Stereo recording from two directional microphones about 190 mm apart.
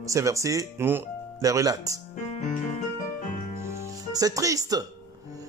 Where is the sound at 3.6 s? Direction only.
15° right (ahead or behind).